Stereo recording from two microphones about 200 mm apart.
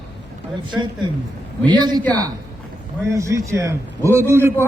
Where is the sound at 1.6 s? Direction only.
20° right (ahead or behind).